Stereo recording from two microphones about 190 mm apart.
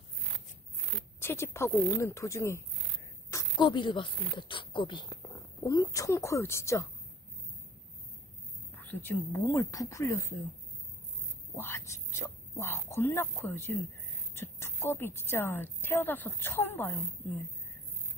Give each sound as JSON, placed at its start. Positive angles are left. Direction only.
{"t": 1.2, "sound": "a woman's voice", "side_deg": 15}
{"t": 8.9, "sound": "a woman's voice", "side_deg": 15}
{"t": 11.5, "sound": "a woman's voice", "side_deg": 10}